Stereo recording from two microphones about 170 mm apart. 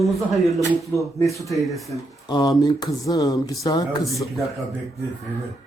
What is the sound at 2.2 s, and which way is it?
Speech, 25° left (ahead or behind).